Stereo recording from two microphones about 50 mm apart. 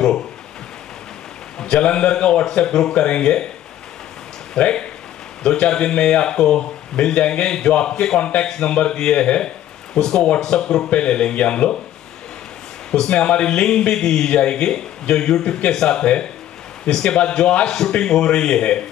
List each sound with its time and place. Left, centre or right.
1.6 s speech: centre
4.6 s speech: left
12.9 s speech: centre